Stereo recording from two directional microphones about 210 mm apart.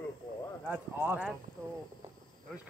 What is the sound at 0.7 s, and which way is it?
Speech, 10° right (ahead or behind).